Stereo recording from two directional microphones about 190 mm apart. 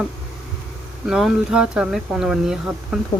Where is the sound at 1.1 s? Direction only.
5° right (ahead or behind).